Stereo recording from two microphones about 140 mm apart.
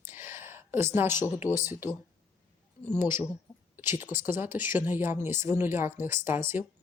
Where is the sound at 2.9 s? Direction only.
15° right (ahead or behind).